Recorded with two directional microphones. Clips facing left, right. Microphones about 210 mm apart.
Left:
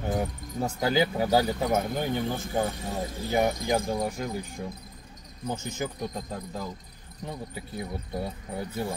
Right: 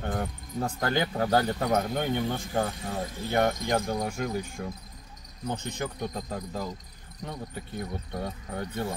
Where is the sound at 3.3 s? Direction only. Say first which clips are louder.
Even; 5° left (ahead or behind).